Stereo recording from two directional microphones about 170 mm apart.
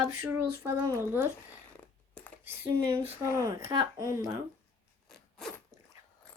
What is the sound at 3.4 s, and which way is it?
Speech, 20° right (ahead or behind).